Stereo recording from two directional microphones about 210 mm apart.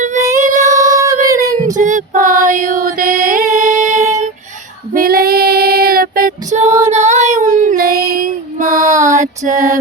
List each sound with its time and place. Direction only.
0.3 s child singing: 35° right (ahead or behind)
0.8 s female singing: 15° right (ahead or behind)
1.6 s music: 35° right (ahead or behind)
4.9 s female singing: 45° right (ahead or behind)
6.8 s child singing: 35° right (ahead or behind)
8.7 s child singing: 15° right (ahead or behind)
9.2 s music: 35° right (ahead or behind)